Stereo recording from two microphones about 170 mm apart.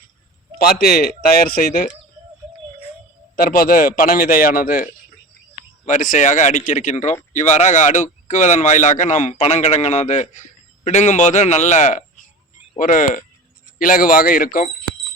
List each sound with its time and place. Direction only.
0.6 s a man's voice: 60° left (ahead or behind)
3.3 s a man's voice: 60° left (ahead or behind)